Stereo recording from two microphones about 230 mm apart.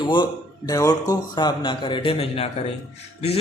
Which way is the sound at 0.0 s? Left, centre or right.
Centre.